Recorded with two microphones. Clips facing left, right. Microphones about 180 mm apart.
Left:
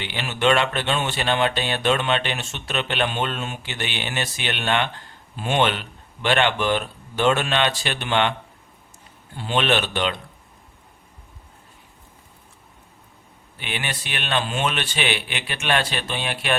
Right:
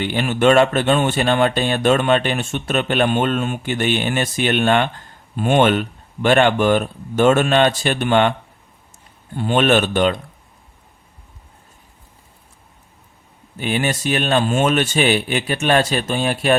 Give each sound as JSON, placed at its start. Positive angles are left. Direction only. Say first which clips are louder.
{"t": 0.0, "sound": "speech", "louder": "right 7 dB", "side_deg": -45}
{"t": 9.3, "sound": "speech", "louder": "right 6 dB", "side_deg": -50}
{"t": 13.6, "sound": "speech", "louder": "right 10 dB", "side_deg": -40}